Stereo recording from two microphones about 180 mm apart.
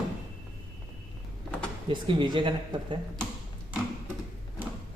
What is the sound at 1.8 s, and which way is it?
Speech, 30° right (ahead or behind).